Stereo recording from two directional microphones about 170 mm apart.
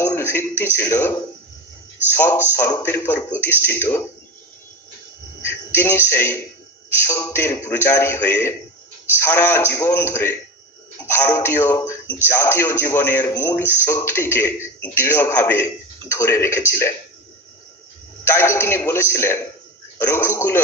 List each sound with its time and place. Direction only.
0.0 s a man's voice: 10° left (ahead or behind)
5.5 s a man's voice: 15° left (ahead or behind)
18.2 s a man's voice: 15° left (ahead or behind)